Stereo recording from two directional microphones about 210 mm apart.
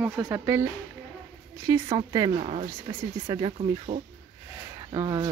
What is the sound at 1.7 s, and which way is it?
Speech, 20° right (ahead or behind).